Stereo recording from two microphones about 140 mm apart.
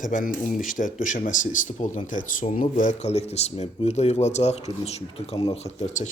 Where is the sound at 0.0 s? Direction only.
65° left (ahead or behind).